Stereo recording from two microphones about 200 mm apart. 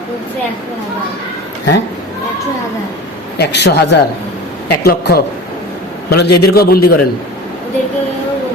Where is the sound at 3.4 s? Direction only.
60° left (ahead or behind).